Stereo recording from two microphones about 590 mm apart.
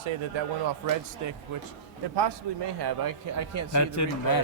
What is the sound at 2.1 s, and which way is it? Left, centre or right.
A man's voice, right.